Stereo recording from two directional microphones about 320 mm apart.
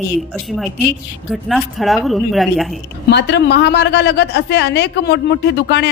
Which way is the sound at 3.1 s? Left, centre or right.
Left.